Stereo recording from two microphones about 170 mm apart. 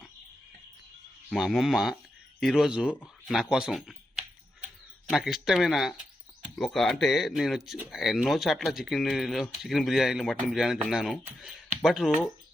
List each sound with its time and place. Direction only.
1.3 s speech: centre (ahead or behind)
2.9 s speech: 10° left (ahead or behind)
3.3 s speech: centre (ahead or behind)